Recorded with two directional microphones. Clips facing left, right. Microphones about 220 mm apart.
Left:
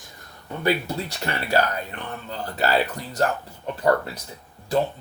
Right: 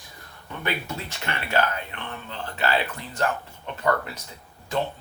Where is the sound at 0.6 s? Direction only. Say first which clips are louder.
Left 7 dB; 35° left (ahead or behind).